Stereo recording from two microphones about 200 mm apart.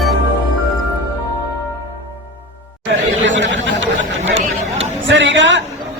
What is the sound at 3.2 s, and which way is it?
Chatter, 65° right (ahead or behind).